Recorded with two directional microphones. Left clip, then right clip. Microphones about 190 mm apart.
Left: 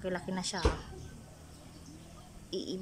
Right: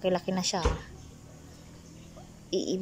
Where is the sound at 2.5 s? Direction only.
5° right (ahead or behind).